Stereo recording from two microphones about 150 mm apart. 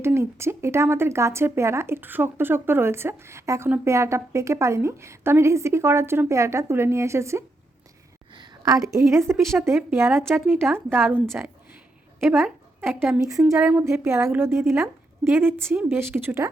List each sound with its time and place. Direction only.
0.0 s a woman's voice: 15° right (ahead or behind)
8.3 s a sound: 30° right (ahead or behind)
8.9 s a woman's voice: 20° right (ahead or behind)
12.2 s a woman's voice: 15° right (ahead or behind)